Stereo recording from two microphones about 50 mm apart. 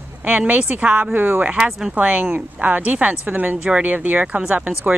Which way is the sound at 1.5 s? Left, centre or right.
Centre.